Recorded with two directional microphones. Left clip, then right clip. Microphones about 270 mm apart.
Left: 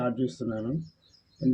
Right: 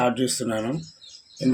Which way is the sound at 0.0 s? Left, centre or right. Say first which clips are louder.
Right 7 dB; right.